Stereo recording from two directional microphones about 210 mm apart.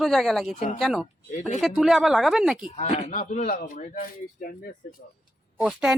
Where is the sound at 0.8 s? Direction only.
Centre (ahead or behind).